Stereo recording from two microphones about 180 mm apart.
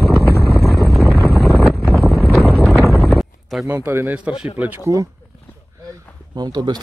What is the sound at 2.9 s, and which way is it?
Clip-clop, centre (ahead or behind).